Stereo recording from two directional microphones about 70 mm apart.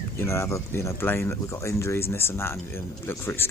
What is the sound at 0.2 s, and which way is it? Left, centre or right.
Speech, left.